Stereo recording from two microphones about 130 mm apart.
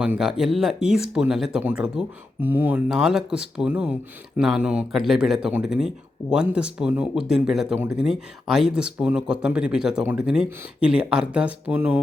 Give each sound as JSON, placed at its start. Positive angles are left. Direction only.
{"t": 0.0, "sound": "speech", "side_deg": -5}
{"t": 2.9, "sound": "speech", "side_deg": -5}